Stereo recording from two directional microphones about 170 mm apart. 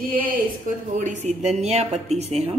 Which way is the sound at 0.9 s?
45° right (ahead or behind).